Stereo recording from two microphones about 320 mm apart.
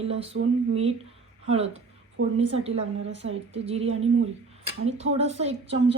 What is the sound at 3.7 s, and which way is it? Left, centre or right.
Speech, centre.